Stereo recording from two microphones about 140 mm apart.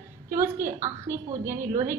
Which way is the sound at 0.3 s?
20° right (ahead or behind).